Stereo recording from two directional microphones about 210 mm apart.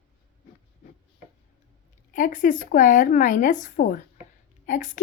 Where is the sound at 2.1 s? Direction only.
40° left (ahead or behind).